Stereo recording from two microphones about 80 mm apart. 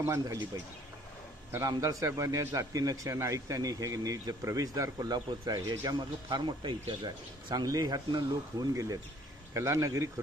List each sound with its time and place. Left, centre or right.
0.0 s speech: right
7.5 s speech: right
8.7 s speech: right